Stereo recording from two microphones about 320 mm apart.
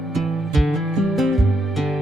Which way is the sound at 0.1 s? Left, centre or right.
Centre.